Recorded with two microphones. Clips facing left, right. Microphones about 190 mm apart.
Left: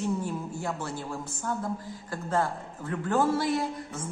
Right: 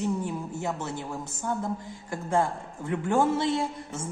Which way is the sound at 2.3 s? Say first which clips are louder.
Right 2 dB; 25° right (ahead or behind).